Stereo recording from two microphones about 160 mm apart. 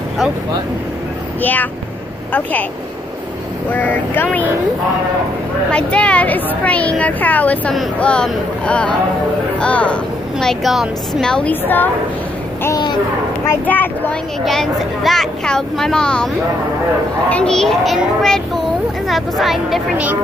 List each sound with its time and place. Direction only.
1.4 s a woman's voice: 10° left (ahead or behind)
3.7 s speech: 10° left (ahead or behind)
5.7 s a woman's voice: 5° left (ahead or behind)
12.6 s a child's voice: 25° left (ahead or behind)
13.5 s a woman's voice: 10° left (ahead or behind)
14.4 s speech: centre (ahead or behind)
17.3 s speech: 5° left (ahead or behind)